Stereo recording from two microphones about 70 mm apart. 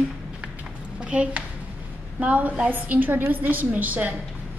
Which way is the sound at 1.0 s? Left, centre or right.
Centre.